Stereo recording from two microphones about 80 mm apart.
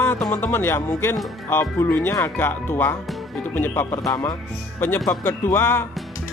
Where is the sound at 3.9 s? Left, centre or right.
Left.